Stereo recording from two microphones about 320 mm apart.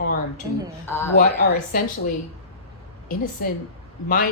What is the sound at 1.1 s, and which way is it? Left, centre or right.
Speech, left.